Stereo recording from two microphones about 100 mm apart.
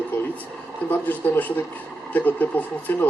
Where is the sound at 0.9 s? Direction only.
15° left (ahead or behind).